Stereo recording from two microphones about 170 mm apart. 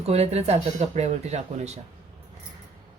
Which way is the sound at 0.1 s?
40° right (ahead or behind).